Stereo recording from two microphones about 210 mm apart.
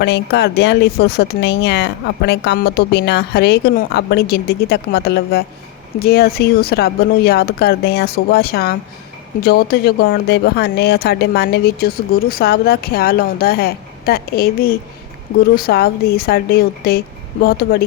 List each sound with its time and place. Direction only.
0.0 s speech: 50° left (ahead or behind)